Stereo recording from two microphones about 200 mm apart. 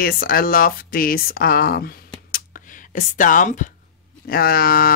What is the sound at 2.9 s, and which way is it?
Speech, 40° left (ahead or behind).